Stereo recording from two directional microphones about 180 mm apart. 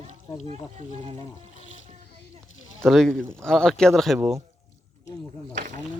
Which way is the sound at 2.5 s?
90° left.